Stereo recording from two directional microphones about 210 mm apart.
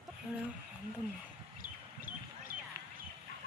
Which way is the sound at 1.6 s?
10° right (ahead or behind).